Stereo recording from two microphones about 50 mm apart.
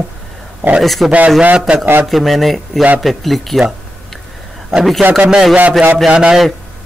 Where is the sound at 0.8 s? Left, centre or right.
Centre.